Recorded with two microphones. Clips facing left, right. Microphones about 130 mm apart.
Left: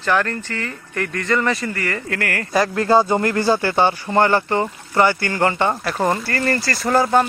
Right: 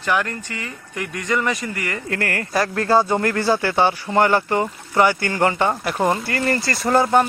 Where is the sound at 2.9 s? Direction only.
Centre (ahead or behind).